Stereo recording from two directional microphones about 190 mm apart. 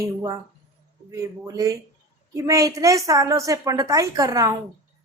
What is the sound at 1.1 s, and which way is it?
Speech, 15° right (ahead or behind).